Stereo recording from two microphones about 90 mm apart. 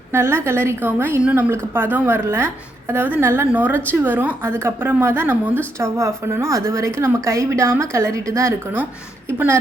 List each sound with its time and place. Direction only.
0.1 s a woman's voice: 25° right (ahead or behind)